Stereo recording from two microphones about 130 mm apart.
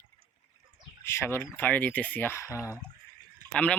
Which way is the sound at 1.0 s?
20° left (ahead or behind).